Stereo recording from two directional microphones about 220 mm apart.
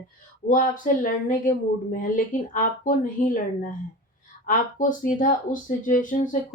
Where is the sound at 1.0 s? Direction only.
35° left (ahead or behind).